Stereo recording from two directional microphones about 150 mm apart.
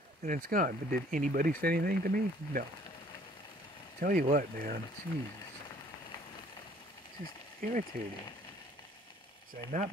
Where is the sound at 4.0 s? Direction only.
90° right.